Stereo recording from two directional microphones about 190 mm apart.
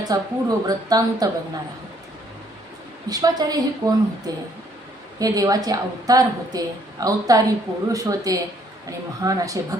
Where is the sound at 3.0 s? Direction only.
20° right (ahead or behind).